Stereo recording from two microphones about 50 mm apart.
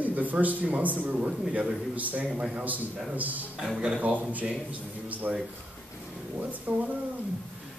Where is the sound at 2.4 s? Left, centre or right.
Centre.